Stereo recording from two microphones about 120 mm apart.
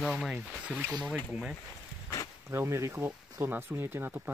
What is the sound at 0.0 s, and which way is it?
Speech, 5° right (ahead or behind).